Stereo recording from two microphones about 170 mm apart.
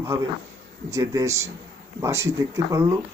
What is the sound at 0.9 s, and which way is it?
Speech, 20° right (ahead or behind).